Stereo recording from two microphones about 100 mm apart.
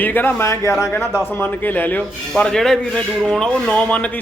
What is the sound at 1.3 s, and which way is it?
Speech, 20° left (ahead or behind).